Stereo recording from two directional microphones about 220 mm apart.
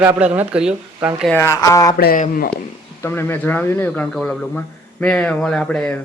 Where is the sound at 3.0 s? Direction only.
10° left (ahead or behind).